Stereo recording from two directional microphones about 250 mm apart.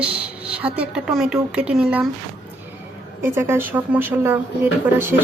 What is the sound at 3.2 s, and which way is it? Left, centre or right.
Speech, centre.